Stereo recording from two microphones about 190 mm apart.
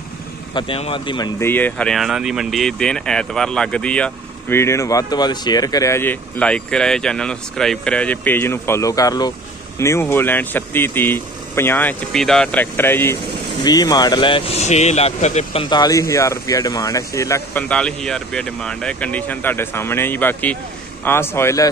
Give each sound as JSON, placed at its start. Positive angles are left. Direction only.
{"t": 0.6, "sound": "speech", "side_deg": 30}
{"t": 1.4, "sound": "speech", "side_deg": 10}